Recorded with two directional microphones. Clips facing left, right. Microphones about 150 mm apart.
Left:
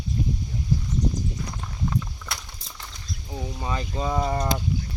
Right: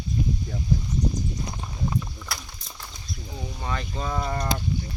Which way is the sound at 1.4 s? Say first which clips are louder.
Even; 20° right (ahead or behind).